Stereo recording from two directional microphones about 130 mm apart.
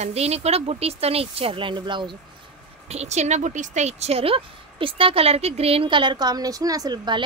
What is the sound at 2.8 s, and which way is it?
Speech, 55° right (ahead or behind).